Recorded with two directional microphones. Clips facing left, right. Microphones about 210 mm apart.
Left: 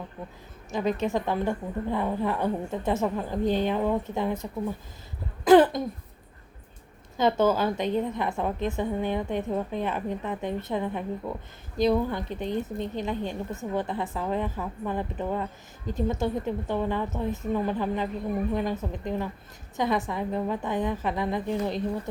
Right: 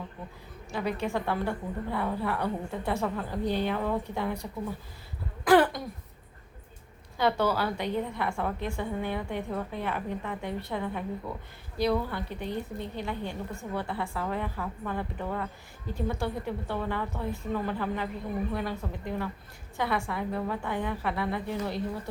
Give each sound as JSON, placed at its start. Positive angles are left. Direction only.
{"t": 0.7, "sound": "a woman's voice", "side_deg": 20}
{"t": 5.5, "sound": "throat clearing", "side_deg": 20}
{"t": 7.2, "sound": "a woman's voice", "side_deg": 20}